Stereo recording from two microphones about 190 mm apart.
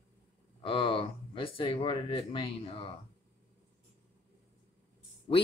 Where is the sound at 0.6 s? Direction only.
25° left (ahead or behind).